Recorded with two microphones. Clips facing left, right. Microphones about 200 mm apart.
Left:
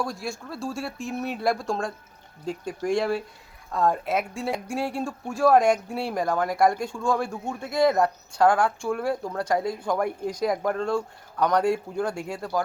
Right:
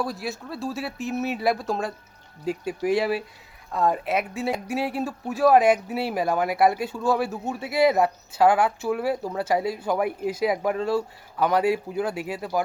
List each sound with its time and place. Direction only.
0.0 s speech: 5° right (ahead or behind)